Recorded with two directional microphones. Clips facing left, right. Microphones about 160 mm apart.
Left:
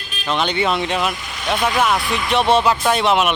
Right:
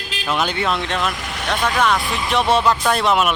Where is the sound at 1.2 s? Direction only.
65° right (ahead or behind).